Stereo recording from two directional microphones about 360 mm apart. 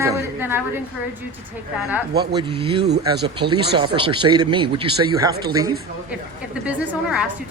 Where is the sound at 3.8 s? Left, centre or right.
Centre.